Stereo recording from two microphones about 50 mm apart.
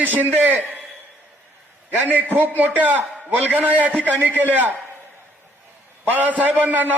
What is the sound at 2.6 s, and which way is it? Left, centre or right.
A man's voice, right.